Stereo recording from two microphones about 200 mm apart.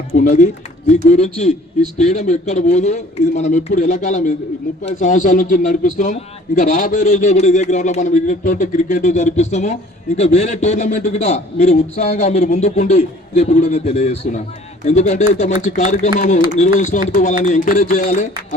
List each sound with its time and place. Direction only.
0.1 s a man's voice: 40° left (ahead or behind)